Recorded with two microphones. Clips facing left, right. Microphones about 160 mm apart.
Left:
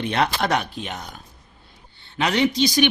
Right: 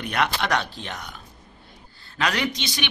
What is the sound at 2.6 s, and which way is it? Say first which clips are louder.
Speech: left 12 dB; 40° left (ahead or behind).